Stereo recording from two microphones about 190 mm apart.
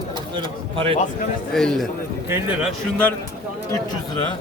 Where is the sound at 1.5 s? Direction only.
Centre (ahead or behind).